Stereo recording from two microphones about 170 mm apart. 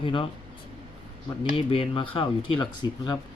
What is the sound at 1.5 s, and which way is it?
Speech, 35° left (ahead or behind).